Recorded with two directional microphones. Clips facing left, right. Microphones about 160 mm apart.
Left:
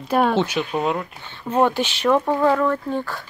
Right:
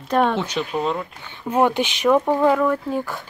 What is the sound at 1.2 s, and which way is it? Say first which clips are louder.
Speech: even; 10° right (ahead or behind).